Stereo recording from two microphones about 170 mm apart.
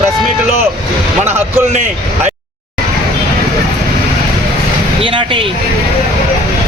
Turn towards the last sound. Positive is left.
turn(degrees=-30)  # may be behind; listen again after turning